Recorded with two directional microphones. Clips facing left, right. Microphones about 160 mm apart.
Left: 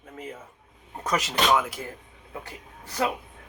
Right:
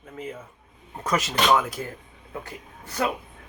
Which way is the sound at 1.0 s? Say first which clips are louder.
Right 2 dB; 15° left (ahead or behind).